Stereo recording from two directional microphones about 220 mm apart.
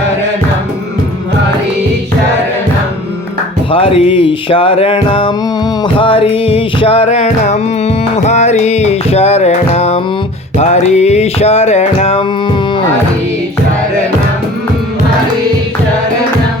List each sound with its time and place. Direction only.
3.7 s music: 25° left (ahead or behind)